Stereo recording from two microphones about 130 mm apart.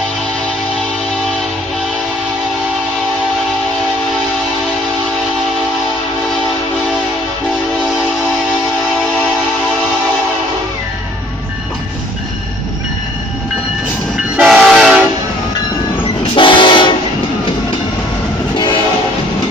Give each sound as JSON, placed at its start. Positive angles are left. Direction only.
{"t": 14.3, "sound": "train", "side_deg": 0}
{"t": 16.3, "sound": "train", "side_deg": 40}